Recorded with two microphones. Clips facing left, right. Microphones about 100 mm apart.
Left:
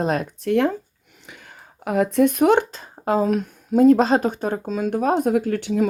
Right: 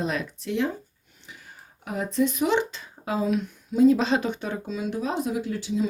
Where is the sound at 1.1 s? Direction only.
75° left (ahead or behind).